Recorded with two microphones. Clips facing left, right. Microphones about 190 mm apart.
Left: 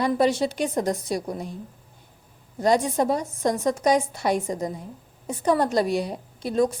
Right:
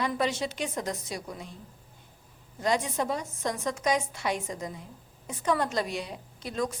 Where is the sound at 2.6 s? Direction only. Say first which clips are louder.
Left 7 dB; 45° left (ahead or behind).